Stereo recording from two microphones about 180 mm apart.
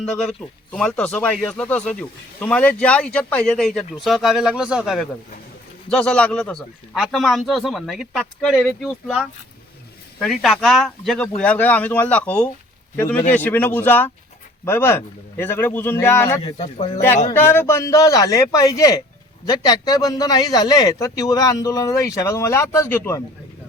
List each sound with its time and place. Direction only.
0.0 s a man's voice: 5° left (ahead or behind)
16.4 s a man's voice: 35° left (ahead or behind)
17.3 s a man's voice: 15° left (ahead or behind)